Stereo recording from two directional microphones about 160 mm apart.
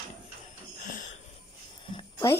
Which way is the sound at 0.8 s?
55° left (ahead or behind).